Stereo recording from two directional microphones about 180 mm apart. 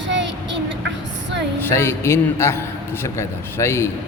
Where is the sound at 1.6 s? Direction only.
15° left (ahead or behind).